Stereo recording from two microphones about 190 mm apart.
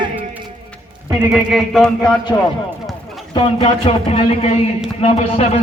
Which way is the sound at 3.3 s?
30° left (ahead or behind).